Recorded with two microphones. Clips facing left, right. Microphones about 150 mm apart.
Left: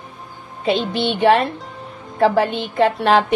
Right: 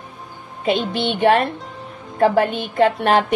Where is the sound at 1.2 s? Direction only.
50° right (ahead or behind).